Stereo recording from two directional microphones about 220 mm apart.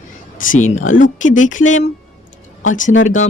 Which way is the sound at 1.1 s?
35° left (ahead or behind).